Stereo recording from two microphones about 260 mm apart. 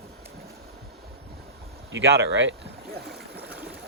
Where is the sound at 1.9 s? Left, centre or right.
Right.